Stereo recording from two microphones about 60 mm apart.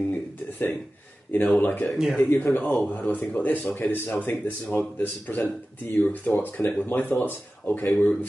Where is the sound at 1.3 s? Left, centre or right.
Left.